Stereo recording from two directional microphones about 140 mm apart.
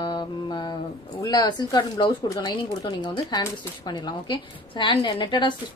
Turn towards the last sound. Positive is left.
turn(degrees=35)  # may be behind; listen again after turning